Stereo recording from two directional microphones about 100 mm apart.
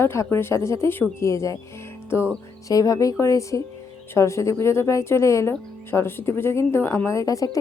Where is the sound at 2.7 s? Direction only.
35° left (ahead or behind).